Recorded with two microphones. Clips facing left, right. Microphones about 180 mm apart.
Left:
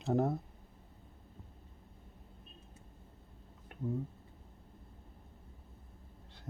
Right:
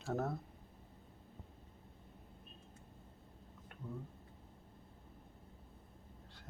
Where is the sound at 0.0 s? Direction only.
15° left (ahead or behind).